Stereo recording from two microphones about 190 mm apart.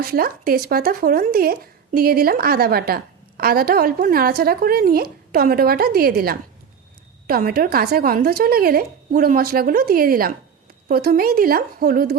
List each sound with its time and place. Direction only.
0.0 s speech: 50° right (ahead or behind)